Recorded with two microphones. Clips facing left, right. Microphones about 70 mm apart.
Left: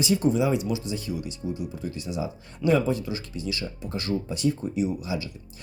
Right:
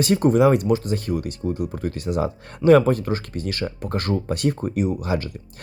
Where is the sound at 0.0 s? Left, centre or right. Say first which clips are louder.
Right 6 dB; right.